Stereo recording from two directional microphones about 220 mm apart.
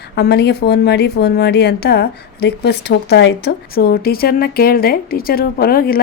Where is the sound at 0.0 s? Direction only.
45° left (ahead or behind).